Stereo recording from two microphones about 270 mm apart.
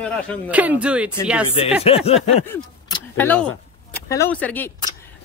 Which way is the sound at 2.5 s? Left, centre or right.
Centre.